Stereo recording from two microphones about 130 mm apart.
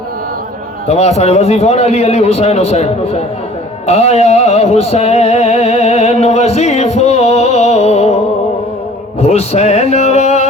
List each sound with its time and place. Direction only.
0.9 s a man's voice: 55° left (ahead or behind)
3.8 s music: 55° left (ahead or behind)
9.2 s music: 55° left (ahead or behind)